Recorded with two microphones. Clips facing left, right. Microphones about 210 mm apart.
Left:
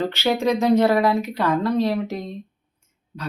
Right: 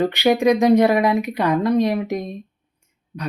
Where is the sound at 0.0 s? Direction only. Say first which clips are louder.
Right 5 dB; 15° right (ahead or behind).